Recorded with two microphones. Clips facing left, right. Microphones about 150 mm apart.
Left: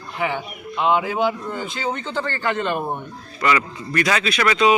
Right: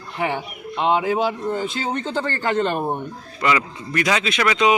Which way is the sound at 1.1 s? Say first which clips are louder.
Right 1 dB; 35° right (ahead or behind).